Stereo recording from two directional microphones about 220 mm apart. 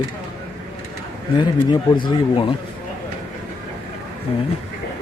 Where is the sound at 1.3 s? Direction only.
20° left (ahead or behind).